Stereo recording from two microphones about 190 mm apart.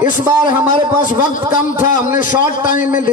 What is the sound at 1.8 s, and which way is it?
A man's voice, 45° left (ahead or behind).